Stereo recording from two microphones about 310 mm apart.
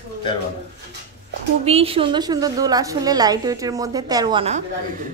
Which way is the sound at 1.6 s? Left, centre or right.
Centre.